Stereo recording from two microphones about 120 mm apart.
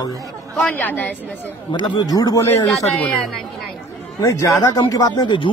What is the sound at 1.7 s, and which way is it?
Speech, 40° left (ahead or behind).